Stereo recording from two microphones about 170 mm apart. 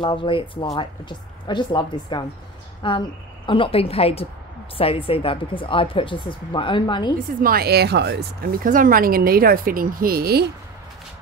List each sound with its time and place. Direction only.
0.0 s speech: 30° left (ahead or behind)
7.2 s speech: 60° right (ahead or behind)